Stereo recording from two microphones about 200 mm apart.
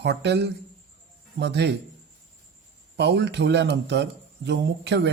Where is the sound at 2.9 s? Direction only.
60° right (ahead or behind).